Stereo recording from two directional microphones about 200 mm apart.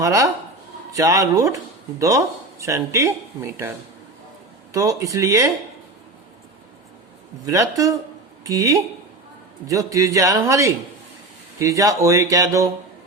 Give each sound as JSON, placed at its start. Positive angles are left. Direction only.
{"t": 0.0, "sound": "speech", "side_deg": -15}
{"t": 4.7, "sound": "speech", "side_deg": -15}
{"t": 7.4, "sound": "speech", "side_deg": -15}